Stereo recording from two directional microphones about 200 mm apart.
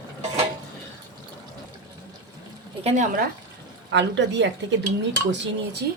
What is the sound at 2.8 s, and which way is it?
Speech, 35° right (ahead or behind).